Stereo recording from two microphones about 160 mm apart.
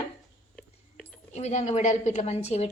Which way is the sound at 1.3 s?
45° left (ahead or behind).